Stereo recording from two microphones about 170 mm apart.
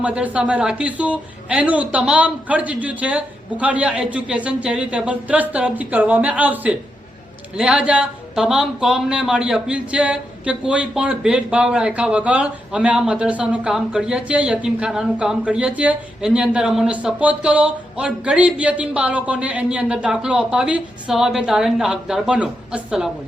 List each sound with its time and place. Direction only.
0.0 s speech: 10° right (ahead or behind)